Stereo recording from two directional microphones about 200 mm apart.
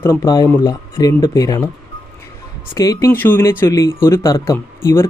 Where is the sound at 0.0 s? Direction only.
15° left (ahead or behind).